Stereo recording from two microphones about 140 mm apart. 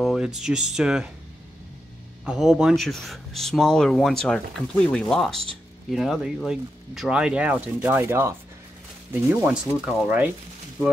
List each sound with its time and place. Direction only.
0.0 s speech: 5° right (ahead or behind)
2.2 s speech: 5° right (ahead or behind)